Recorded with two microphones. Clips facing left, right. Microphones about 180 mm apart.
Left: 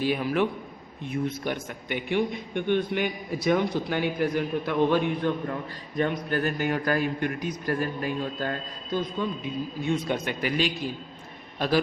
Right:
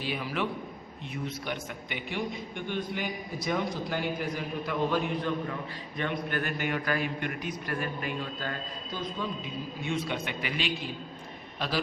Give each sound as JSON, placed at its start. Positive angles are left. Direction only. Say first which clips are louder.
{"t": 0.0, "sound": "a man's voice", "louder": "left 7 dB", "side_deg": 50}
{"t": 6.0, "sound": "a man's voice", "louder": "left 6 dB", "side_deg": 40}